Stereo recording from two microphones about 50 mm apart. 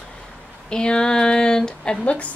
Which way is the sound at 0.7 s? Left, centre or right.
Centre.